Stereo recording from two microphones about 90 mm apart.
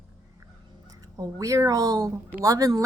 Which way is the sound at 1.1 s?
40° right (ahead or behind).